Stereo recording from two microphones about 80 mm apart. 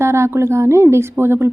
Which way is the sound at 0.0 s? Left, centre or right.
Right.